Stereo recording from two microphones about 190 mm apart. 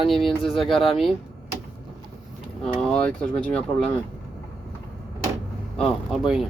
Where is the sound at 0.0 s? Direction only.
Centre (ahead or behind).